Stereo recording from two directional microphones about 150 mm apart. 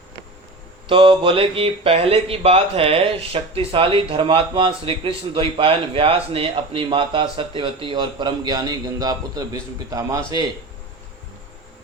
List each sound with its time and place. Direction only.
0.9 s speech: 35° right (ahead or behind)